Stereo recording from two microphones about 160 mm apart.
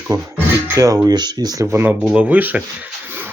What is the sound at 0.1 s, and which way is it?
Speech, 20° right (ahead or behind).